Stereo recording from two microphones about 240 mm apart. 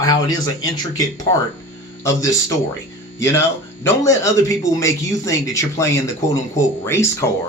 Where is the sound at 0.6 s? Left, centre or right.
Centre.